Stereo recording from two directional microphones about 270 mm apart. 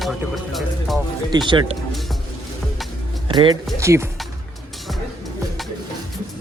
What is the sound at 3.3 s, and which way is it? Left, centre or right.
Speech, centre.